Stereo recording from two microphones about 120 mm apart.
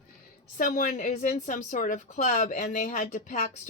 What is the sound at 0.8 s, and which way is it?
A woman's voice, 90° left.